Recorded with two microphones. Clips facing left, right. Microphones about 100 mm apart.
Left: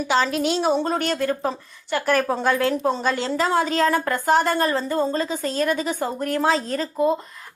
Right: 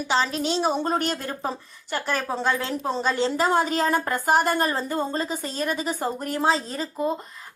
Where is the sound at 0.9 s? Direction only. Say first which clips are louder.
Left 1 dB; 40° right (ahead or behind).